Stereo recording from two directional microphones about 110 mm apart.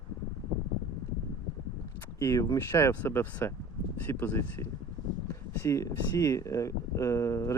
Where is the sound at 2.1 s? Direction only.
30° left (ahead or behind).